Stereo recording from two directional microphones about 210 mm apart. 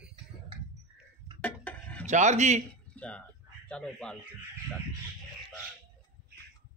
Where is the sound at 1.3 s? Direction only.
5° left (ahead or behind).